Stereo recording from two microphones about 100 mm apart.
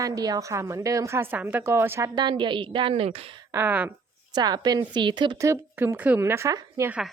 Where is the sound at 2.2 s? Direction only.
50° right (ahead or behind); by 3.4 s 75° right (ahead or behind).